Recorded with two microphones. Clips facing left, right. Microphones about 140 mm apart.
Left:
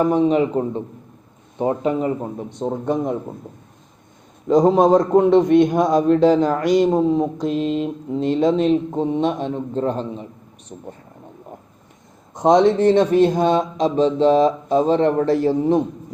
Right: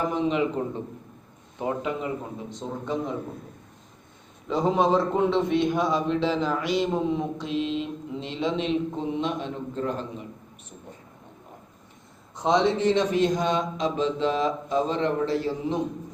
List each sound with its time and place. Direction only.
0.2 s speech: 40° left (ahead or behind)
2.8 s speech: 55° left (ahead or behind)
4.4 s a man's voice: 40° left (ahead or behind)
12.3 s a man's voice: 45° left (ahead or behind)
13.5 s speech: 35° left (ahead or behind)
15.2 s a man's voice: 50° left (ahead or behind)